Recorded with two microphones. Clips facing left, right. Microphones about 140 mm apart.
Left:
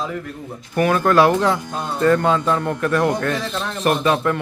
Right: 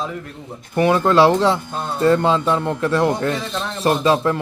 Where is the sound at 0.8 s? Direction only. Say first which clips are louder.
Right 1 dB; 20° right (ahead or behind).